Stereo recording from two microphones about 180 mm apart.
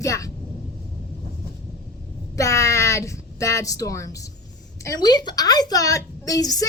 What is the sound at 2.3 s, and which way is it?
A woman's voice, 15° left (ahead or behind).